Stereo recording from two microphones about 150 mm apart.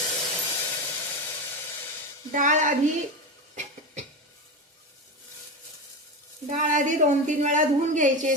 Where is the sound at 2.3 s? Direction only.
55° right (ahead or behind).